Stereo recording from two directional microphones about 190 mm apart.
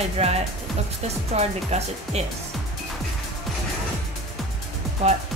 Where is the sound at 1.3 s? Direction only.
35° right (ahead or behind).